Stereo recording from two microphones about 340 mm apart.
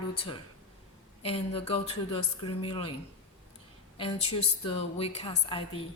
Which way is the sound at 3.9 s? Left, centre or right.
Centre.